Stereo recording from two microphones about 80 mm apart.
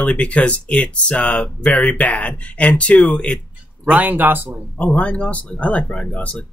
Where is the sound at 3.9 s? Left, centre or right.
Right.